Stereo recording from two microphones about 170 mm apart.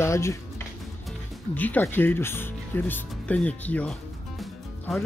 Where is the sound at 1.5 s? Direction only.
10° left (ahead or behind).